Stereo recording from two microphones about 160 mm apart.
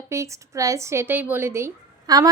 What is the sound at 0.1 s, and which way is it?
A woman's voice, 20° right (ahead or behind).